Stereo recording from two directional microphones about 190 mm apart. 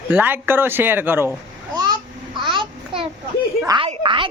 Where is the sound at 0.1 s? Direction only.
10° right (ahead or behind).